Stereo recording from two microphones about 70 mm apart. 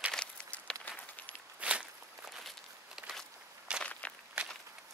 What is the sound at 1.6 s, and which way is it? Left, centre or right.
Walk, centre.